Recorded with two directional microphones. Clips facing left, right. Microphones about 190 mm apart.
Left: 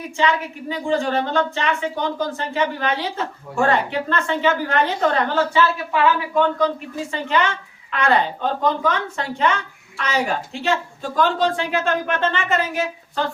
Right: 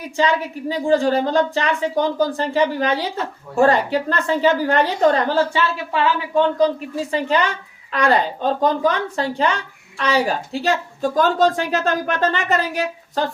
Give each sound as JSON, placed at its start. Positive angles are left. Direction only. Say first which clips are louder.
{"t": 0.2, "sound": "a woman's voice", "louder": "right 2 dB", "side_deg": -35}